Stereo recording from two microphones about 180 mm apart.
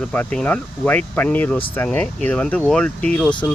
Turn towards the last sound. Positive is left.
turn(degrees=5)  # may be behind; listen again after turning